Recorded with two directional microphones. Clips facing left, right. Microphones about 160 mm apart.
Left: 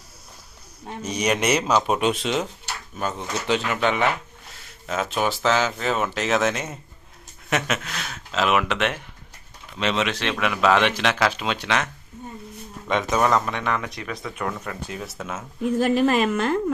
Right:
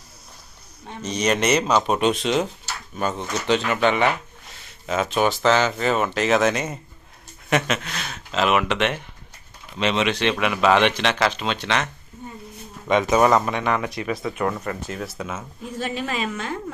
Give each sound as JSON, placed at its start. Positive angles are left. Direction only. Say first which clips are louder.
{"t": 0.9, "sound": "speech", "louder": "right 1 dB", "side_deg": 10}
{"t": 12.9, "sound": "speech", "louder": "right 4 dB", "side_deg": -5}
{"t": 15.8, "sound": "a woman's voice", "louder": "left 7 dB", "side_deg": 50}